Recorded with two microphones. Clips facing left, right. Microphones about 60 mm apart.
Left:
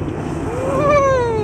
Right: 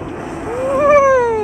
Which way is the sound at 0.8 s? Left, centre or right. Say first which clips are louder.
Right 4 dB; right.